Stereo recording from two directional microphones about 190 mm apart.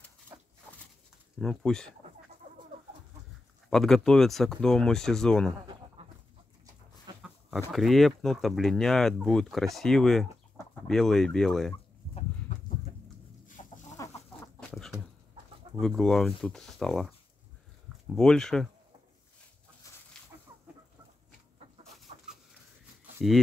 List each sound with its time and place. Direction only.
0.3 s a sound: 15° right (ahead or behind)
1.4 s speech: 5° left (ahead or behind)
3.7 s speech: centre (ahead or behind)
7.2 s speech: centre (ahead or behind)
13.6 s chicken: 35° left (ahead or behind)
13.9 s chicken: 15° left (ahead or behind)
14.7 s a sound: centre (ahead or behind)
15.8 s speech: centre (ahead or behind)
18.1 s speech: 5° left (ahead or behind)
21.8 s chicken: centre (ahead or behind)